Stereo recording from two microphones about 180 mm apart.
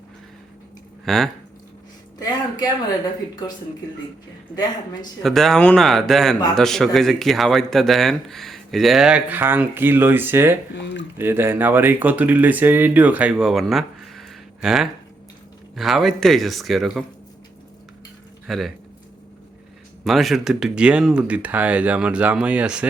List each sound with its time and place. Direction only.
1.0 s speech: centre (ahead or behind)
2.1 s speech: 20° left (ahead or behind)
5.2 s speech: centre (ahead or behind)
10.8 s speech: 80° left
11.2 s speech: 15° right (ahead or behind)
18.4 s speech: centre (ahead or behind)
20.1 s speech: centre (ahead or behind)